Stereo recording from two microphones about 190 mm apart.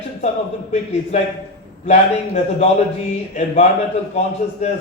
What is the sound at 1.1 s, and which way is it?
Speech, 35° left (ahead or behind).